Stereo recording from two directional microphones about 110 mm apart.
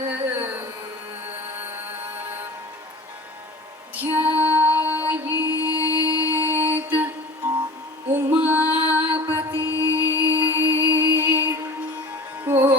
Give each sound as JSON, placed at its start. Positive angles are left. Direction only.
{"t": 0.1, "sound": "a sound", "side_deg": -15}
{"t": 1.3, "sound": "music", "side_deg": -15}
{"t": 3.9, "sound": "music", "side_deg": -15}
{"t": 5.5, "sound": "music", "side_deg": 30}
{"t": 6.6, "sound": "music", "side_deg": -15}
{"t": 8.7, "sound": "mantra", "side_deg": -15}
{"t": 9.6, "sound": "music", "side_deg": 30}
{"t": 10.2, "sound": "music", "side_deg": -15}